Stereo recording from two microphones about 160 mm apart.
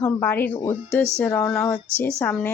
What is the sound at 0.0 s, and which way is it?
Speech, 10° left (ahead or behind).